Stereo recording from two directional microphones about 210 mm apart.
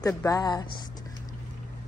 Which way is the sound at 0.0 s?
15° left (ahead or behind).